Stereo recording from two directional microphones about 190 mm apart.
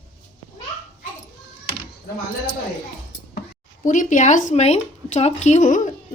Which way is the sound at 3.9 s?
40° left (ahead or behind).